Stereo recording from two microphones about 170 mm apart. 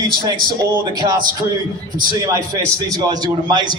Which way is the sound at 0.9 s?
25° right (ahead or behind).